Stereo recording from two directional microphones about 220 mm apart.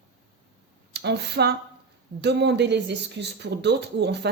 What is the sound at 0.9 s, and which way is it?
Speech, 50° right (ahead or behind).